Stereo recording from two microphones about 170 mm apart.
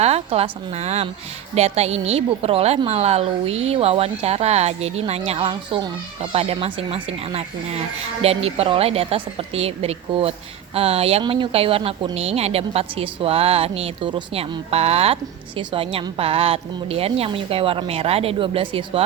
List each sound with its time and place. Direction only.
0.0 s speech: 40° right (ahead or behind)